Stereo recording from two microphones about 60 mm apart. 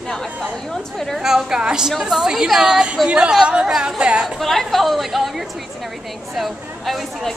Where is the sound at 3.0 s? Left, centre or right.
Centre.